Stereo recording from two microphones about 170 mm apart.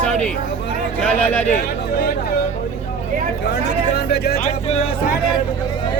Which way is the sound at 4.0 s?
70° left (ahead or behind).